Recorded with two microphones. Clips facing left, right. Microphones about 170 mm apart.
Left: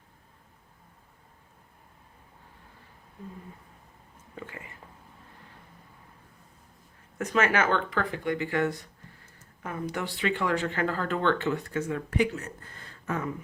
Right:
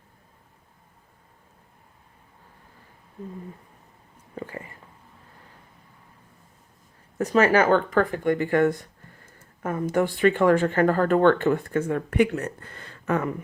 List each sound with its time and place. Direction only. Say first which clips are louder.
4.4 s speech: right 7 dB; 35° right (ahead or behind)
7.2 s speech: right 6 dB; 35° right (ahead or behind); by 13.3 s 70° right (ahead or behind)